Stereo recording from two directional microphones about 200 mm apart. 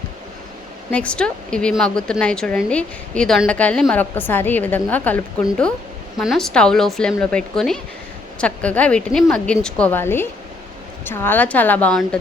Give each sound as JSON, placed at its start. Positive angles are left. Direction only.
{"t": 0.9, "sound": "a woman's voice", "side_deg": 5}